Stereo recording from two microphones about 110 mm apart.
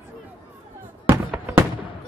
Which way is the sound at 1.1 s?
15° right (ahead or behind).